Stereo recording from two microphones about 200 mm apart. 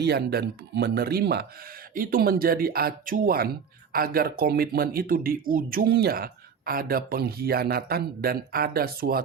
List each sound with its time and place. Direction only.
0.0 s speech: 55° right (ahead or behind)